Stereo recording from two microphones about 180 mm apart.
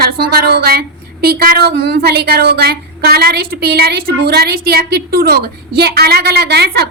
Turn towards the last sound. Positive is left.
turn(degrees=-65)  # may be behind; listen again after turning